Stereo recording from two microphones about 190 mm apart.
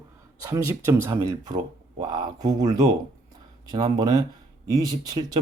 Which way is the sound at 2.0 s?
20° right (ahead or behind).